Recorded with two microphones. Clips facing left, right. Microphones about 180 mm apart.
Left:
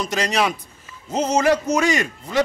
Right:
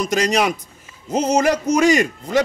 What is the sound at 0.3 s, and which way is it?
A man's voice, 40° right (ahead or behind).